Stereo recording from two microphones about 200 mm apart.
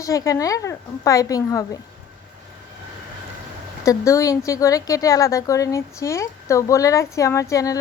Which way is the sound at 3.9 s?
15° left (ahead or behind).